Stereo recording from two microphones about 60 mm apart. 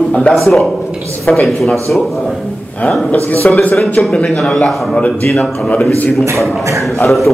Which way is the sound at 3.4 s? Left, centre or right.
Left.